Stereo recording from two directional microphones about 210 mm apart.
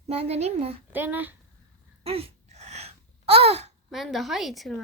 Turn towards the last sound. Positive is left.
turn(degrees=0)  # may be behind; listen again after turning